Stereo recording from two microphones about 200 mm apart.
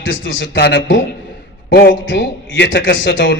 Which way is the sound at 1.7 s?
55° left (ahead or behind).